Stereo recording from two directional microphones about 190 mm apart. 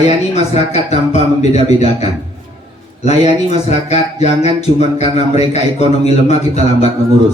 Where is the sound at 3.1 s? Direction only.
35° left (ahead or behind).